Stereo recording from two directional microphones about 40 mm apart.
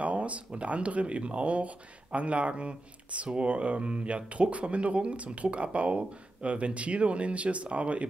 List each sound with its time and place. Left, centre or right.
0.0 s speech: right